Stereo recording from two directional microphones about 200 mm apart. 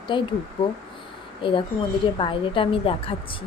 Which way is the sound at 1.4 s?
25° left (ahead or behind).